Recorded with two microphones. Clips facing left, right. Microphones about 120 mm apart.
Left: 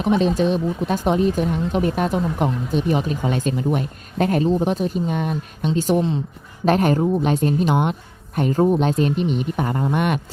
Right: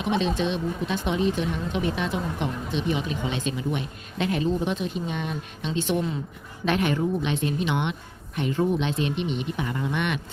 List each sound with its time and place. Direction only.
0.0 s a woman's voice: 40° left (ahead or behind)